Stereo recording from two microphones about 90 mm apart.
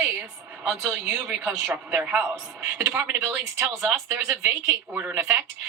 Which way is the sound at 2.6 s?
30° right (ahead or behind).